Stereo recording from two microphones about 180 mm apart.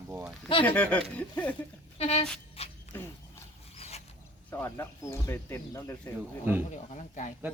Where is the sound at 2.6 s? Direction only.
35° left (ahead or behind).